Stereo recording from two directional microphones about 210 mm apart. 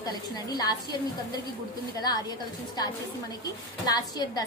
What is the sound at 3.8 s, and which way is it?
Speech, 20° left (ahead or behind).